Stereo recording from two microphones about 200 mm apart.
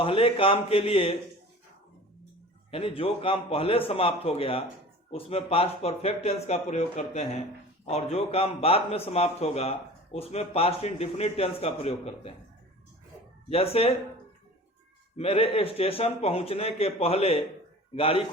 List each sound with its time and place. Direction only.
0.0 s a man's voice: 25° left (ahead or behind)
2.6 s a man's voice: 30° left (ahead or behind)
13.5 s a man's voice: 30° left (ahead or behind)
15.2 s a man's voice: 30° left (ahead or behind)